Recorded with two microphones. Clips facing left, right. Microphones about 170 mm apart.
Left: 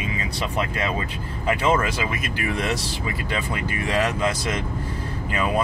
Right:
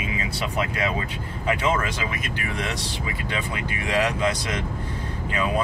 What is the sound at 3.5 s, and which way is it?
Speech, 45° left (ahead or behind).